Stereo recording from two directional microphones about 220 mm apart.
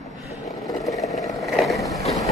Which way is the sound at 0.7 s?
Centre (ahead or behind).